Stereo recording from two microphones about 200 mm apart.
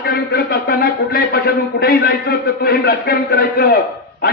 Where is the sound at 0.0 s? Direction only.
50° left (ahead or behind).